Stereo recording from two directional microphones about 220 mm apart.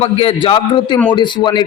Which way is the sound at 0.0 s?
25° left (ahead or behind).